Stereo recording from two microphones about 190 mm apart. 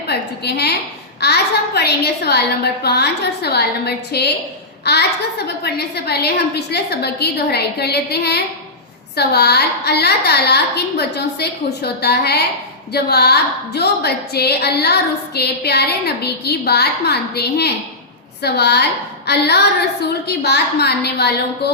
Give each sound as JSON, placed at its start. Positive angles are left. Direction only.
{"t": 0.1, "sound": "a woman's voice", "side_deg": 60}